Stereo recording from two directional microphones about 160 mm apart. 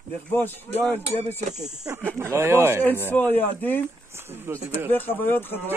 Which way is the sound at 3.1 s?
10° left (ahead or behind).